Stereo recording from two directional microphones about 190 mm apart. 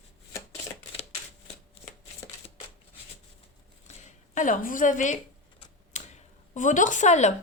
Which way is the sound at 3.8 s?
40° left (ahead or behind).